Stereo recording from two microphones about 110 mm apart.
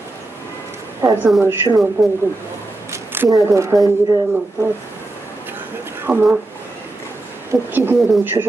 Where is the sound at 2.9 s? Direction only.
20° right (ahead or behind).